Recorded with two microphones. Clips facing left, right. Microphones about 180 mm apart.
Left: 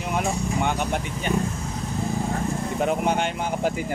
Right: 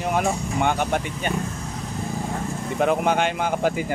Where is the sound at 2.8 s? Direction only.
85° right.